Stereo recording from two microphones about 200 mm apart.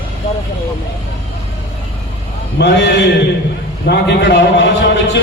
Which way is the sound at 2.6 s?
60° left (ahead or behind).